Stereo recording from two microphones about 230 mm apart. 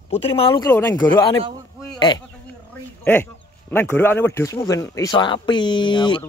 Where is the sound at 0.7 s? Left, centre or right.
Centre.